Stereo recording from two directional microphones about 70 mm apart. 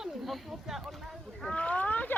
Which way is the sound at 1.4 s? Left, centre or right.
Centre.